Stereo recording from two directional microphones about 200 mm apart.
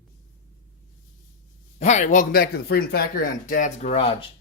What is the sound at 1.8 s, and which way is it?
Speech, 35° left (ahead or behind).